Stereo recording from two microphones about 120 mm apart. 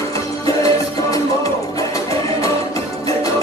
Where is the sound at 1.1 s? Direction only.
30° left (ahead or behind).